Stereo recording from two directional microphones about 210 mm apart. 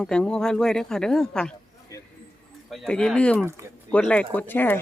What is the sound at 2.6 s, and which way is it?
Speech, centre (ahead or behind).